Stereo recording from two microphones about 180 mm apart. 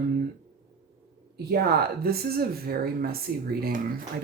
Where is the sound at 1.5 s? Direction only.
60° right (ahead or behind).